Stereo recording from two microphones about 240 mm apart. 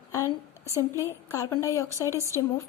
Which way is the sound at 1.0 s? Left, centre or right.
Centre.